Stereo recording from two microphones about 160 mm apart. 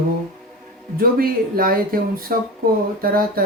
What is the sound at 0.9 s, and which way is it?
A man's voice, 65° right (ahead or behind).